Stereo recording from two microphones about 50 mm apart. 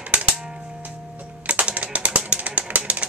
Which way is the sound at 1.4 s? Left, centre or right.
Right.